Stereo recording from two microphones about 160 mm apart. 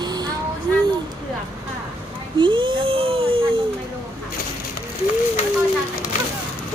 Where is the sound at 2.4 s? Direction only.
30° right (ahead or behind).